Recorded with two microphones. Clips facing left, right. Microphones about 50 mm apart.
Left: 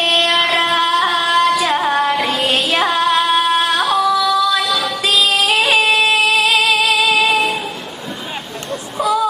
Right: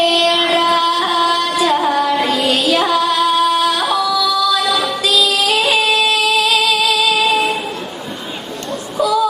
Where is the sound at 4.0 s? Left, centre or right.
Left.